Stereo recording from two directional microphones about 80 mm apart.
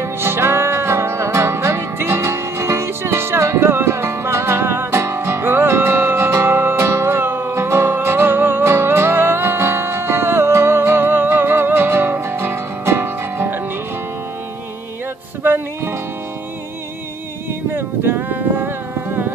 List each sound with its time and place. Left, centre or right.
0.0 s music: right
15.4 s music: right
17.5 s a sound: right